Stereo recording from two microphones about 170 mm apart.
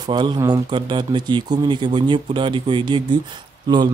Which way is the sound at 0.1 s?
25° right (ahead or behind).